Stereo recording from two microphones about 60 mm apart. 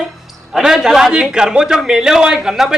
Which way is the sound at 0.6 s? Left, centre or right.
Centre.